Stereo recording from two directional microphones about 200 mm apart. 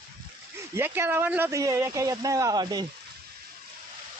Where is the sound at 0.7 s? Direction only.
10° right (ahead or behind).